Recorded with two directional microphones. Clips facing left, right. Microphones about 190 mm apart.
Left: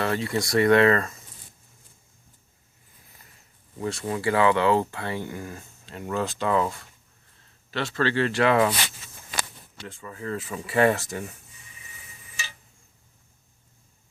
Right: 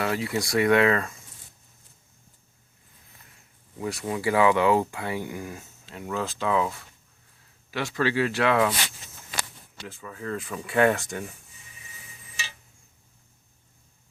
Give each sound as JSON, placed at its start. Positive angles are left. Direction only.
{"t": 0.0, "sound": "speech", "side_deg": -10}
{"t": 3.2, "sound": "a sound", "side_deg": 0}
{"t": 3.8, "sound": "speech", "side_deg": -15}
{"t": 7.7, "sound": "speech", "side_deg": -10}
{"t": 9.8, "sound": "speech", "side_deg": 0}